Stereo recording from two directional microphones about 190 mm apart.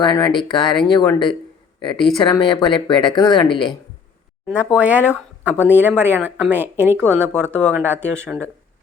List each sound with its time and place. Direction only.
0.0 s speech: 25° left (ahead or behind)
4.4 s speech: 5° right (ahead or behind)